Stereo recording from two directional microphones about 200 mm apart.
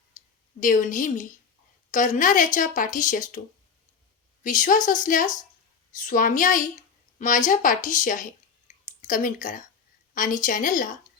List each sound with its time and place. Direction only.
0.1 s a sound: 40° left (ahead or behind)
0.6 s speech: 40° left (ahead or behind)
4.4 s speech: 40° left (ahead or behind)